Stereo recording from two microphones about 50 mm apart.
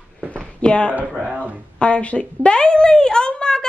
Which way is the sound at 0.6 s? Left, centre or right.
Left.